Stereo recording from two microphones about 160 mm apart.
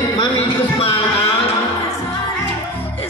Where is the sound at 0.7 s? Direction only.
35° left (ahead or behind).